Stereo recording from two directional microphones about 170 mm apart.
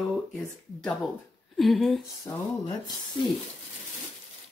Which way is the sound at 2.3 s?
15° left (ahead or behind).